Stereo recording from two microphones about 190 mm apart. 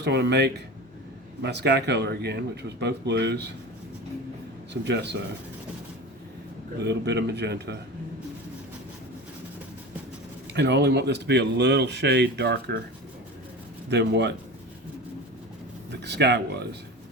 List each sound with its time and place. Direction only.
0.0 s speech: 60° right (ahead or behind)
4.7 s speech: 65° right (ahead or behind)
6.8 s speech: 65° right (ahead or behind)
10.5 s speech: 65° right (ahead or behind)
13.9 s speech: 65° right (ahead or behind)
15.9 s speech: 65° right (ahead or behind)